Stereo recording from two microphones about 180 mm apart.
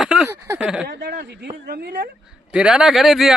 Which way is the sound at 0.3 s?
15° right (ahead or behind).